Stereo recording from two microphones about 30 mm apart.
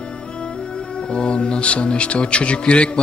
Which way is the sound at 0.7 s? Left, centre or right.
Left.